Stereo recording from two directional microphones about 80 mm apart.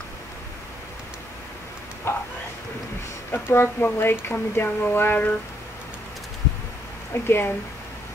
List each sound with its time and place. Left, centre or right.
2.1 s speech: left
3.3 s speech: left
7.2 s speech: left